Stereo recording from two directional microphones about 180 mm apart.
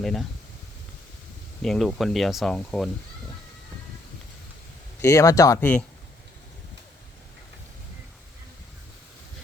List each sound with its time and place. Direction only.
0.0 s speech: centre (ahead or behind)
1.6 s speech: centre (ahead or behind)
5.0 s speech: 20° left (ahead or behind)